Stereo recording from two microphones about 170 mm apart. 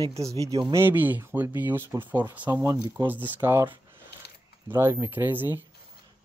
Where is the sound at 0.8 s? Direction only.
10° right (ahead or behind).